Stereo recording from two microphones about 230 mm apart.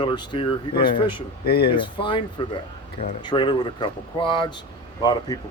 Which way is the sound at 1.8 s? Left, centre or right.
Left.